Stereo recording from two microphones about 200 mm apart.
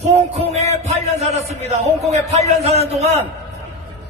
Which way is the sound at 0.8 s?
35° right (ahead or behind).